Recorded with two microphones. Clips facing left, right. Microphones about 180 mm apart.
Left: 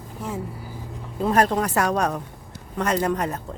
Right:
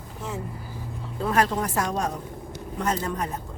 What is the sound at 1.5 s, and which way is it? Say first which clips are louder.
A man's voice: left 4 dB; 75° left (ahead or behind).